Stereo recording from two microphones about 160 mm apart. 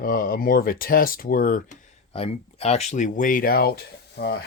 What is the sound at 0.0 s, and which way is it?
Speech, 65° left (ahead or behind).